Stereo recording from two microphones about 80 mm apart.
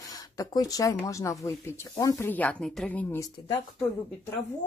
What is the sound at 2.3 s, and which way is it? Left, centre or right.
Speech, centre.